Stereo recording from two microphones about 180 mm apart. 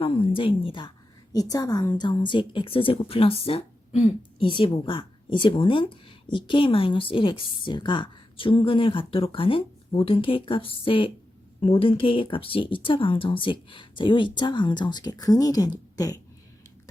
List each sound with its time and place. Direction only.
0.0 s a woman's voice: 30° left (ahead or behind)